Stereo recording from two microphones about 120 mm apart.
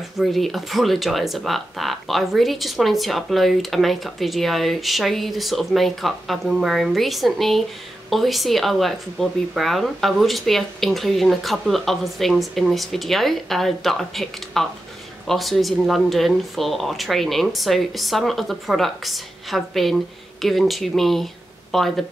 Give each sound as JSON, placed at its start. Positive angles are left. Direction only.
{"t": 0.2, "sound": "speech", "side_deg": 0}